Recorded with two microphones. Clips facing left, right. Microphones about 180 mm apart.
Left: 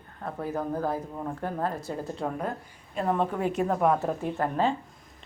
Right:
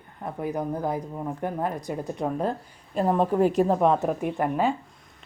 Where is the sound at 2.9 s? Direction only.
35° right (ahead or behind); by 4.7 s 15° right (ahead or behind).